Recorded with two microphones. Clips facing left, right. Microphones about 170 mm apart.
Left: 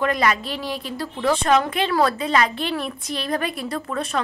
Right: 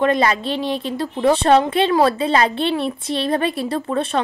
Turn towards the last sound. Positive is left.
turn(degrees=-30)  # may be behind; listen again after turning